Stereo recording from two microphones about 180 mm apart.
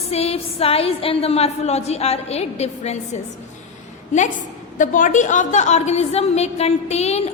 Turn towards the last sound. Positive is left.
turn(degrees=35)  # may be behind; listen again after turning